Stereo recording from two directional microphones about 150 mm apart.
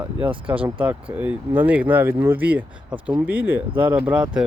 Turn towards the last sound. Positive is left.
turn(degrees=-5)  # may be behind; listen again after turning